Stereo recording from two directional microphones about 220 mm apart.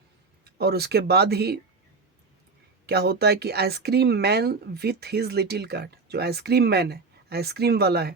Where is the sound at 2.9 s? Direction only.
45° right (ahead or behind).